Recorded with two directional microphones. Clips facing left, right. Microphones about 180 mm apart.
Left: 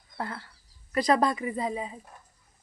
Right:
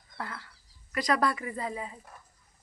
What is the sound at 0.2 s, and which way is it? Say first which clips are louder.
Speech: left 4 dB; 30° left (ahead or behind).